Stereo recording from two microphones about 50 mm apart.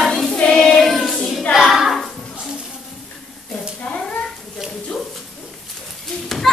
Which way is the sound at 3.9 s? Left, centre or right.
Left.